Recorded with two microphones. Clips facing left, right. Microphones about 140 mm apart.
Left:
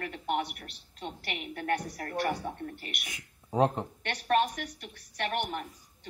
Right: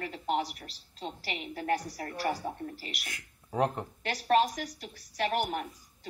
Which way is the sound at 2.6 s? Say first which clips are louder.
Even; 30° right (ahead or behind).